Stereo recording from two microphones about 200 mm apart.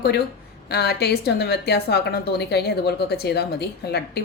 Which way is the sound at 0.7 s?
55° left (ahead or behind).